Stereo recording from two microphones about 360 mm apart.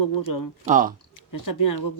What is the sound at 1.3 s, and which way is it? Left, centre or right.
Speech, left.